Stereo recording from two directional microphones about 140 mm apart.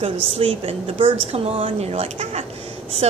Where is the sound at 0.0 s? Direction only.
45° right (ahead or behind).